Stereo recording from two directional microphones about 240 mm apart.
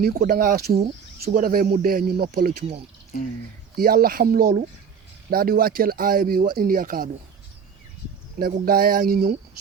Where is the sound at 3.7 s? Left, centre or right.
Right.